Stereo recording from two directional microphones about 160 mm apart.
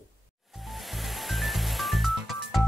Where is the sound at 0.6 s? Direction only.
Centre (ahead or behind).